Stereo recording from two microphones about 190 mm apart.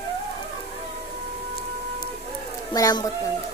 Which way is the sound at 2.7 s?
20° left (ahead or behind).